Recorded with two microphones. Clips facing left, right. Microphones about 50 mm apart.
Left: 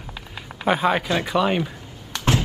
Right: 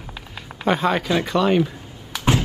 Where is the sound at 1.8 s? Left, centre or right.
Centre.